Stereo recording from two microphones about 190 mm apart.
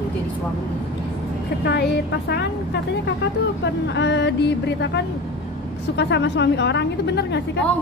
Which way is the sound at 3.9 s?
65° left (ahead or behind).